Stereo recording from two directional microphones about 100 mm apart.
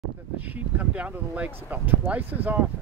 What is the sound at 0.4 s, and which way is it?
Speech, 15° right (ahead or behind).